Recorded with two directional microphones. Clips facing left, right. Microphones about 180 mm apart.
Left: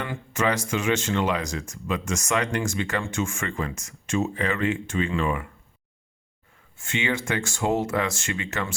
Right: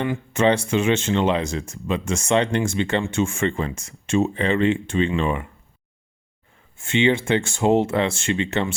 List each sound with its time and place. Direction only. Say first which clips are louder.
0.3 s speech: right 6 dB; 30° right (ahead or behind)
6.7 s speech: right 8 dB; 25° right (ahead or behind)